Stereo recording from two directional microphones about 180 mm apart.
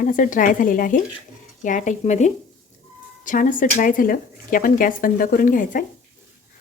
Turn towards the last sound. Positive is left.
turn(degrees=45)  # may be behind; listen again after turning